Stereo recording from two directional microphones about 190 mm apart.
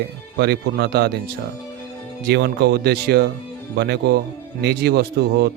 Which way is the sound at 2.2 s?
60° right (ahead or behind).